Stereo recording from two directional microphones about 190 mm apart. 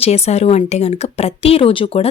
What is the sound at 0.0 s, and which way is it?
Speech, 35° left (ahead or behind).